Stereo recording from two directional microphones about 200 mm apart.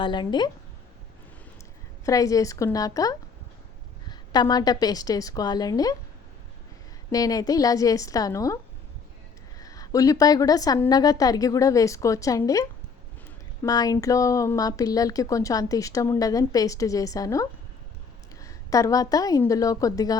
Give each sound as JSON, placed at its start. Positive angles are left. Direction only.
{"t": 0.0, "sound": "a woman's voice", "side_deg": 25}
{"t": 2.0, "sound": "a woman's voice", "side_deg": 15}
{"t": 7.1, "sound": "speech", "side_deg": 20}
{"t": 9.6, "sound": "a woman's voice", "side_deg": 15}